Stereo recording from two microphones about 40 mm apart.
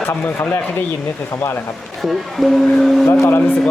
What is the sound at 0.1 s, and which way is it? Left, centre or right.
Speech, left.